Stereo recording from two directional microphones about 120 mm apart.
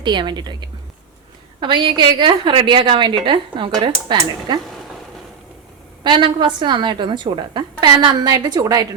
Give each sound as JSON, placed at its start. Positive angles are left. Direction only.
{"t": 0.0, "sound": "a woman's voice", "side_deg": -40}
{"t": 6.0, "sound": "a woman's voice", "side_deg": -40}